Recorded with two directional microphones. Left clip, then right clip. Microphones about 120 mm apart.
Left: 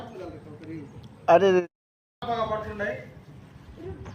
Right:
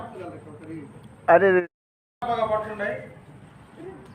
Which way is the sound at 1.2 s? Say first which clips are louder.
Right 2 dB; 35° left (ahead or behind).